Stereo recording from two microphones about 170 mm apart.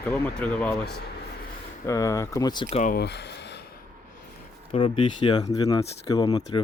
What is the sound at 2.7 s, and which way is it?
Speech, 50° left (ahead or behind).